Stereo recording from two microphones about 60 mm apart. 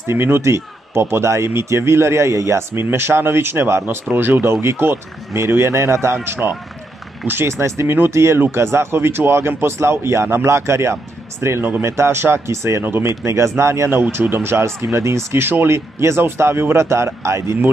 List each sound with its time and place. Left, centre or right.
0.0 s a man's voice: right
6.1 s a man's voice: right
15.4 s speech: right
16.8 s a man's voice: right